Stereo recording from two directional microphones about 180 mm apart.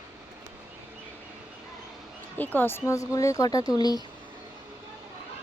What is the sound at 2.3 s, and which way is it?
Speech, 10° left (ahead or behind).